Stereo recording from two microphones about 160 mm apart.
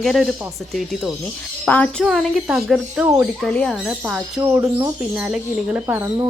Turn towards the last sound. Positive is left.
turn(degrees=-15)  # may be behind; listen again after turning